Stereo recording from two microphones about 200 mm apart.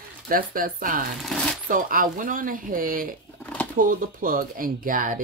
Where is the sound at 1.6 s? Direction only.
45° right (ahead or behind).